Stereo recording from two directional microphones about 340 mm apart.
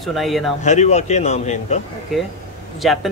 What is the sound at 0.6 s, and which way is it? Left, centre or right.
Speech, centre.